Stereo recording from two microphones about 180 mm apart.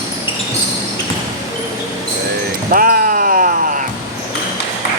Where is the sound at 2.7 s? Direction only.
50° right (ahead or behind).